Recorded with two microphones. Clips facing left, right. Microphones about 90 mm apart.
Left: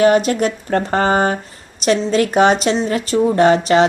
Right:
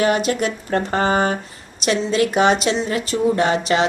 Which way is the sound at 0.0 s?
40° left (ahead or behind).